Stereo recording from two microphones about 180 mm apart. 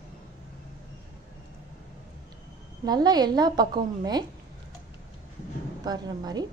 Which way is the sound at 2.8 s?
20° right (ahead or behind).